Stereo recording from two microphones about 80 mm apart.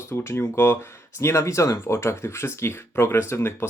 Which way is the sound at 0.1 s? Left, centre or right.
Left.